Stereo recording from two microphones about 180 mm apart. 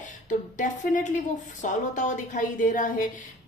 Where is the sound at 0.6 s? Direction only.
45° left (ahead or behind).